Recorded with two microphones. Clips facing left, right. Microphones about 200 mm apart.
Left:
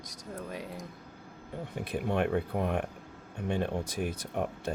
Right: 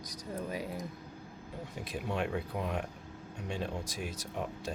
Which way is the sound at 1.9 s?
55° left (ahead or behind).